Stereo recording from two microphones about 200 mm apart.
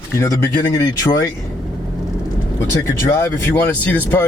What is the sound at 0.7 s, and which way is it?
Speech, 20° left (ahead or behind).